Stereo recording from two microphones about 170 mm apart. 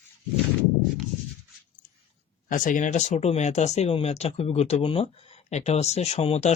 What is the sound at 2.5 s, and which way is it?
Speech, 50° left (ahead or behind).